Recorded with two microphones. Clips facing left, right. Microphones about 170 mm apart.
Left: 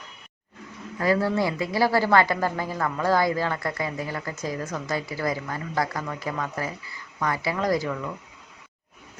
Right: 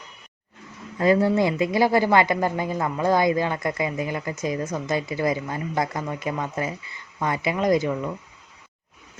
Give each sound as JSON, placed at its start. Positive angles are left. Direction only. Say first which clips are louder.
{"t": 0.9, "sound": "speech", "louder": "right 4 dB", "side_deg": -20}